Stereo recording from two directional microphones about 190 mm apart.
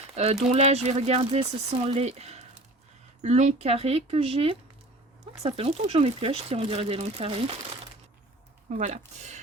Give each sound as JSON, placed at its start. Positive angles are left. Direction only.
{"t": 0.2, "sound": "speech", "side_deg": -35}